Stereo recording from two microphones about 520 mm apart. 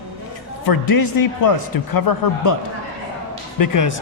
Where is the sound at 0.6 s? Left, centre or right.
Left.